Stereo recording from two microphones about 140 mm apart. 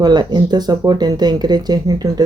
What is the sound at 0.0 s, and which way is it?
Speech, 30° right (ahead or behind).